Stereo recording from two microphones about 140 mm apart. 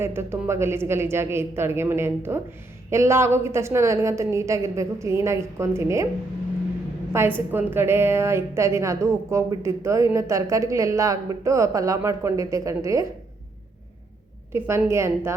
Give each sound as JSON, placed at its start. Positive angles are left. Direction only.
{"t": 0.0, "sound": "a woman's voice", "side_deg": -15}
{"t": 7.1, "sound": "a woman's voice", "side_deg": -15}
{"t": 14.5, "sound": "a woman's voice", "side_deg": -20}